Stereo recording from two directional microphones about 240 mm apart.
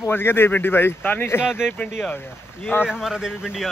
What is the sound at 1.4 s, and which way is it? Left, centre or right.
Speech, centre.